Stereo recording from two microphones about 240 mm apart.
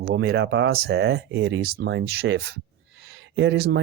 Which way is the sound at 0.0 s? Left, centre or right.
Right.